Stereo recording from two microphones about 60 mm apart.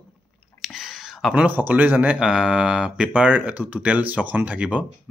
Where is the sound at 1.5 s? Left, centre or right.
Right.